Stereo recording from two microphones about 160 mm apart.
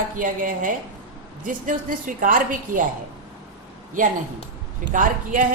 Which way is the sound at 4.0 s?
55° right (ahead or behind).